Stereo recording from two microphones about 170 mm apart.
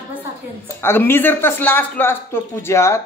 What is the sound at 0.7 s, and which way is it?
Speech, 15° left (ahead or behind).